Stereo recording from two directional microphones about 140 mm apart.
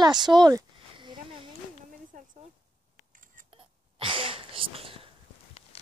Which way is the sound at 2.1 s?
75° right (ahead or behind).